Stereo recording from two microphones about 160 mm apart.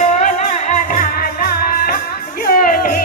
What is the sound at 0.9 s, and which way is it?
Music, 65° left (ahead or behind).